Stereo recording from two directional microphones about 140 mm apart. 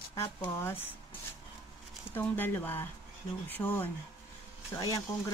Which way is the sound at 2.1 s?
15° left (ahead or behind).